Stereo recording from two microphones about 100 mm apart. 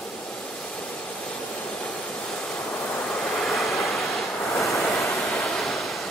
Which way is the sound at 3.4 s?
Centre (ahead or behind).